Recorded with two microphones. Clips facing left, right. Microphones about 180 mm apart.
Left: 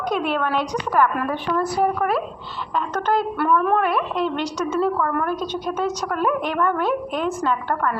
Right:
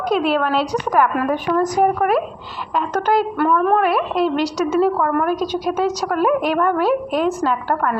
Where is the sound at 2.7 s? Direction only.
10° right (ahead or behind).